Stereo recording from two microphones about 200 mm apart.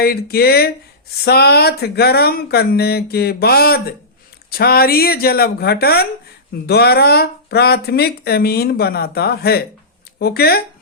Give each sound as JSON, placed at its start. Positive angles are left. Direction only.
{"t": 0.0, "sound": "speech", "side_deg": 50}